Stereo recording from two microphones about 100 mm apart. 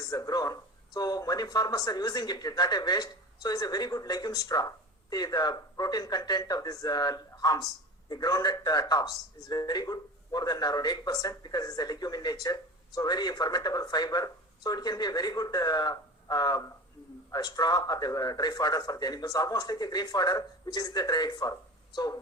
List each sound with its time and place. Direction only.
0.1 s speech: 40° left (ahead or behind)